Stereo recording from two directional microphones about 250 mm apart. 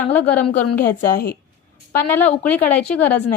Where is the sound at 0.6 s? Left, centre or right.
Left.